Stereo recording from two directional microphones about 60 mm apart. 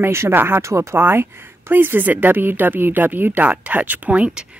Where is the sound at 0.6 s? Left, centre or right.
Right.